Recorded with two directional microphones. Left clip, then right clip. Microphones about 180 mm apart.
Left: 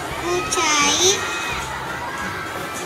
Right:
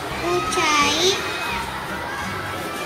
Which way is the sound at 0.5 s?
35° left (ahead or behind).